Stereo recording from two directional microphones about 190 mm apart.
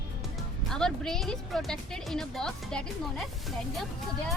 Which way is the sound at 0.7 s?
5° left (ahead or behind).